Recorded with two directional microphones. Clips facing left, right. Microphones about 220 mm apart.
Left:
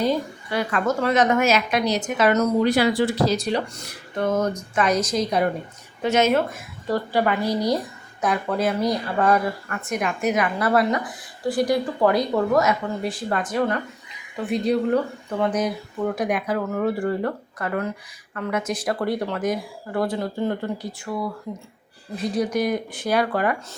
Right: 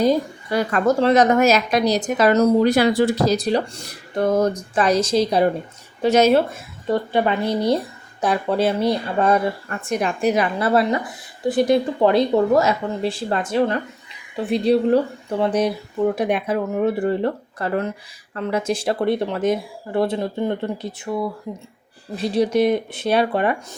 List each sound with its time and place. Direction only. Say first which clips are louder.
0.0 s a woman's voice: right 5 dB; 40° right (ahead or behind)
6.8 s a woman's voice: right 2 dB; 20° right (ahead or behind)
16.1 s speech: right 3 dB; 25° right (ahead or behind)